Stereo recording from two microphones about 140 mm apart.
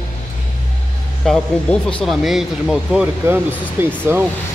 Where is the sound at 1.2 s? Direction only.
5° left (ahead or behind); by 4.2 s 15° right (ahead or behind).